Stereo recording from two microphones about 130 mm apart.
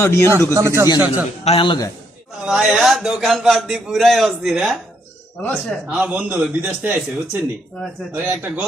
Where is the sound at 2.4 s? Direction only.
5° right (ahead or behind).